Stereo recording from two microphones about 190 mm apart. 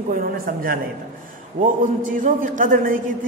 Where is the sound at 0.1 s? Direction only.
50° right (ahead or behind).